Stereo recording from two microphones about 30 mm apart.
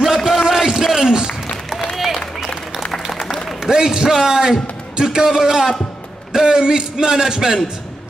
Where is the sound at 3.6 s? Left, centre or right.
Right.